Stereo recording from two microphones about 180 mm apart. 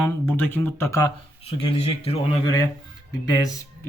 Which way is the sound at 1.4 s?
35° left (ahead or behind).